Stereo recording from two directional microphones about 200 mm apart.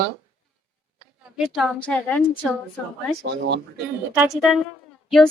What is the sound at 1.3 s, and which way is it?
Speech, 5° right (ahead or behind).